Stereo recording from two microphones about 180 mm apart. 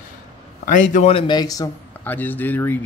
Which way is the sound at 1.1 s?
25° left (ahead or behind).